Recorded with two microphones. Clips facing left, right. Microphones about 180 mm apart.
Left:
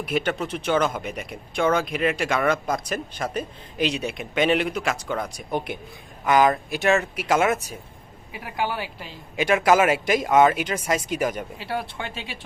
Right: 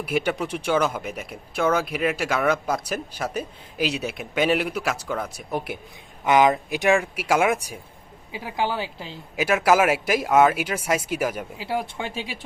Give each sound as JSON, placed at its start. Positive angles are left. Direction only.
{"t": 0.0, "sound": "speech", "side_deg": -10}
{"t": 6.2, "sound": "speech", "side_deg": -20}
{"t": 8.4, "sound": "a woman's voice", "side_deg": -20}
{"t": 9.3, "sound": "speech", "side_deg": -5}